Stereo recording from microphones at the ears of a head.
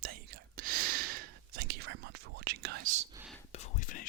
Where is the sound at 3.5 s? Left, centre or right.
Left.